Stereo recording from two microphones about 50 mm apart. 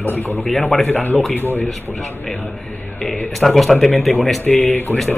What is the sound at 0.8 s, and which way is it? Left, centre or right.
Speech, left.